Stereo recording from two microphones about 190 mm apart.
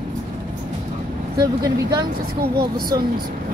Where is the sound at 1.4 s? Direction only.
20° right (ahead or behind).